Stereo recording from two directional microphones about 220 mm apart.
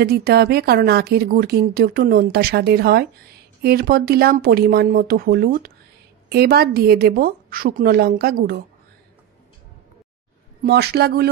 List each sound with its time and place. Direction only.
0.0 s a woman's voice: 45° right (ahead or behind)
10.6 s a woman's voice: 45° right (ahead or behind)